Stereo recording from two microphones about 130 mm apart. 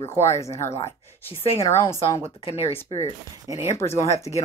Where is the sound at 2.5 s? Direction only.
50° left (ahead or behind).